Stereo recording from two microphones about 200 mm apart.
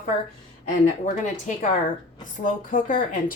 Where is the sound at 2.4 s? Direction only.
45° left (ahead or behind).